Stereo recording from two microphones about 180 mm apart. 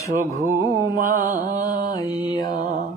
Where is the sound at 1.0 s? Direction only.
45° right (ahead or behind).